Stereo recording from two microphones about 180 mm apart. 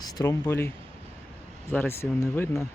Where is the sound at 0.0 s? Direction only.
20° left (ahead or behind).